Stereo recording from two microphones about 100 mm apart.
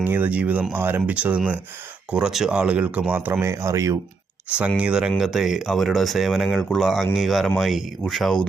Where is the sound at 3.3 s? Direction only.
25° right (ahead or behind).